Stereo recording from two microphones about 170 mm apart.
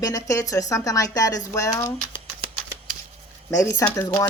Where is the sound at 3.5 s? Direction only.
20° left (ahead or behind).